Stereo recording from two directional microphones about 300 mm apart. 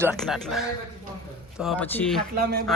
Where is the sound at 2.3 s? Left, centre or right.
Right.